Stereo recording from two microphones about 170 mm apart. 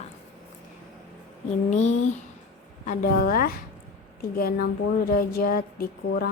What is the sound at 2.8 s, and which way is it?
Speech, 55° left (ahead or behind).